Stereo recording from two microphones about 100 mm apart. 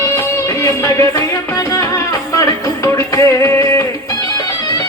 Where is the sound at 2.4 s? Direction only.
30° left (ahead or behind).